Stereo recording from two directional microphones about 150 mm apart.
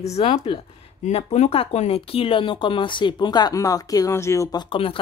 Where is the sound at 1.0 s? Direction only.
45° left (ahead or behind).